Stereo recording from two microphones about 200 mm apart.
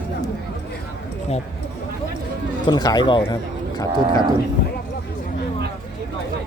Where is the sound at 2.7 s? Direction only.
20° left (ahead or behind).